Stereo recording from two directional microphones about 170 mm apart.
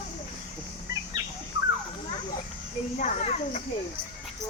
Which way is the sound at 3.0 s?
45° left (ahead or behind).